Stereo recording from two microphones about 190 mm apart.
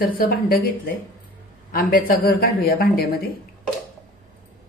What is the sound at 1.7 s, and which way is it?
Speech, 50° left (ahead or behind).